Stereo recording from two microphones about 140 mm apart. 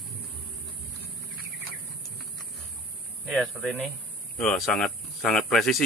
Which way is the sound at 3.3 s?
Centre (ahead or behind).